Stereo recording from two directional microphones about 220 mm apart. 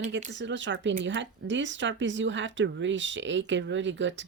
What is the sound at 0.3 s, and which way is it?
Speech, 55° right (ahead or behind).